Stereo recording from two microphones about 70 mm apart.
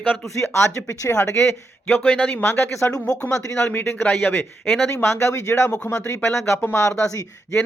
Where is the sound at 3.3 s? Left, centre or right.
Left.